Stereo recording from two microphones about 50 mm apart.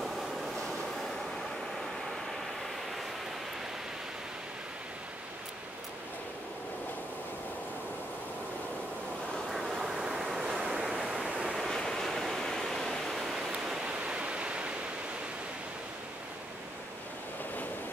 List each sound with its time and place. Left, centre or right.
9.5 s waves: centre
10.4 s waves: centre
11.6 s waterfall: centre
13.5 s pink noise: centre
13.9 s waterfall: right